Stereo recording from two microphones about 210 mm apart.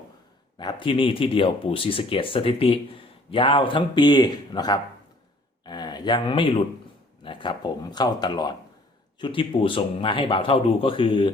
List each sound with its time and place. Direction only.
0.6 s speech: 20° left (ahead or behind)